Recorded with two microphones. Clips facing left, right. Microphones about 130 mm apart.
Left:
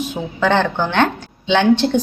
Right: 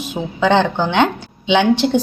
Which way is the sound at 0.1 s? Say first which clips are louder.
Right 4 dB; 15° right (ahead or behind).